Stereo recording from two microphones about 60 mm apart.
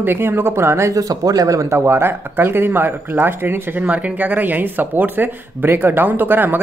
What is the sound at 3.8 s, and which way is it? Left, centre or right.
Speech, right.